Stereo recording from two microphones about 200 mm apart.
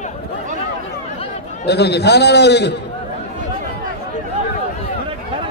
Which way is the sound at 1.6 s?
55° left (ahead or behind).